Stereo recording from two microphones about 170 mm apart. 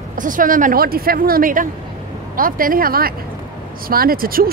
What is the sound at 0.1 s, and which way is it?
Speech, 50° right (ahead or behind).